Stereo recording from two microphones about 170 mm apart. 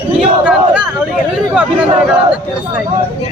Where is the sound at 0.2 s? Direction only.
5° right (ahead or behind).